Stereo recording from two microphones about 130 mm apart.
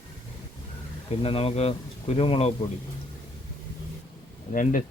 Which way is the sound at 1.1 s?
50° left (ahead or behind).